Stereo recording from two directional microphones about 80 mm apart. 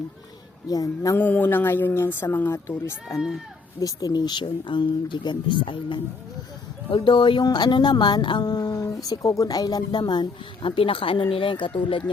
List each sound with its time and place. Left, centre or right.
0.7 s a sound: left
1.1 s a woman's voice: left
3.8 s speech: left
8.7 s speech: left